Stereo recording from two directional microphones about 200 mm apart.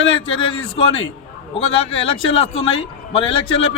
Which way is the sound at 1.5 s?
30° left (ahead or behind).